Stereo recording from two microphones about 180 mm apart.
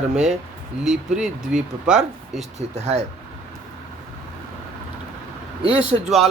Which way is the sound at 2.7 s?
40° right (ahead or behind).